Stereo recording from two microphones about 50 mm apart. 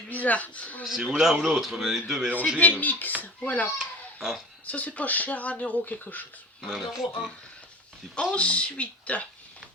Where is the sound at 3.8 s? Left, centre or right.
Centre.